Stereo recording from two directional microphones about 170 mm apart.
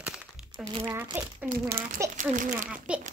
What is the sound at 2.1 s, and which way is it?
Speech, 50° right (ahead or behind).